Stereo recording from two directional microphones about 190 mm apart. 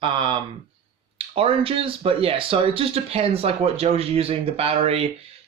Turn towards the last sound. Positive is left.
turn(degrees=-30)  # may be behind; listen again after turning